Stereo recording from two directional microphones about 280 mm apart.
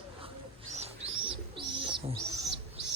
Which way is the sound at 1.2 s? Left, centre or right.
Centre.